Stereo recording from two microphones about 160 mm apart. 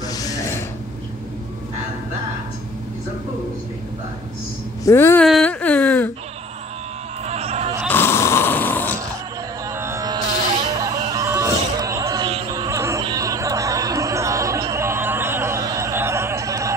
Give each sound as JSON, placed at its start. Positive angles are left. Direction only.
{"t": 0.1, "sound": "mechanisms", "side_deg": 20}
{"t": 4.8, "sound": "speech", "side_deg": 15}
{"t": 5.2, "sound": "whimper", "side_deg": 5}
{"t": 7.2, "sound": "a sound", "side_deg": -40}
{"t": 7.9, "sound": "snoring", "side_deg": 15}
{"t": 9.7, "sound": "a sound", "side_deg": -15}